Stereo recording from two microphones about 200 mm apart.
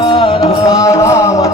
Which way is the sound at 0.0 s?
25° left (ahead or behind).